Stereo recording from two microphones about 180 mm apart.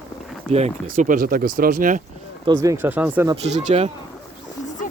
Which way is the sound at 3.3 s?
35° right (ahead or behind).